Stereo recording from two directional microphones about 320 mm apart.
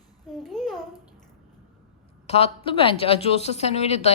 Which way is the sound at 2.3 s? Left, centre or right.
Centre.